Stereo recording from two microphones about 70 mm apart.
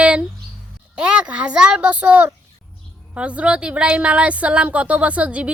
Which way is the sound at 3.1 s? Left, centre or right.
Centre.